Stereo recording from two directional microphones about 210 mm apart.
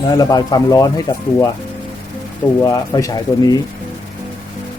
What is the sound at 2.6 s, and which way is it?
Speech, 15° left (ahead or behind).